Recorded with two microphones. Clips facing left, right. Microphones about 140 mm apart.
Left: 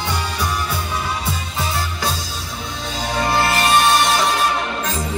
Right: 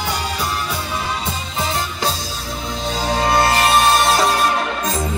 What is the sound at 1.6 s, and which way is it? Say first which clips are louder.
Music: right 3 dB; 30° right (ahead or behind).